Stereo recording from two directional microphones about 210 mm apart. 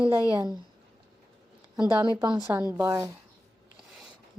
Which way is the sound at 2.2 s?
20° right (ahead or behind).